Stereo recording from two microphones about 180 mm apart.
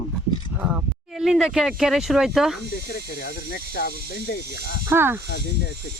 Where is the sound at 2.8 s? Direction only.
65° left (ahead or behind).